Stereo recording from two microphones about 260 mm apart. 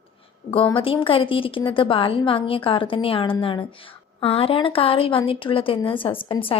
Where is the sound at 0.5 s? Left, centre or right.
Centre.